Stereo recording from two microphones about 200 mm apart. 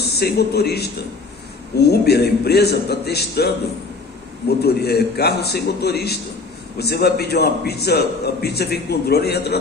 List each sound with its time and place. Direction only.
0.0 s speech: 55° left (ahead or behind)
1.9 s a man's voice: 55° left (ahead or behind)
4.6 s a man's voice: 55° left (ahead or behind)